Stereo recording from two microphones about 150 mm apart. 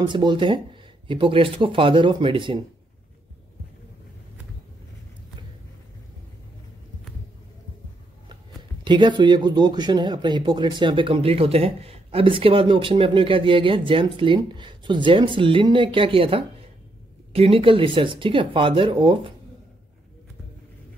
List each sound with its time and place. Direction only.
0.0 s speech: 30° right (ahead or behind)
8.8 s speech: 30° right (ahead or behind)